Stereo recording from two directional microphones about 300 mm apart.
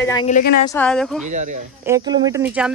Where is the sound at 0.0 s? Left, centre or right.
Centre.